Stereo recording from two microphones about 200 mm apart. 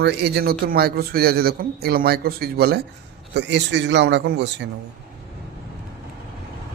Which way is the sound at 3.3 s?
60° right (ahead or behind).